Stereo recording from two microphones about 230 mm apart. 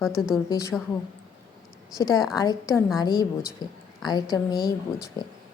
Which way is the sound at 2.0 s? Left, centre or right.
Centre.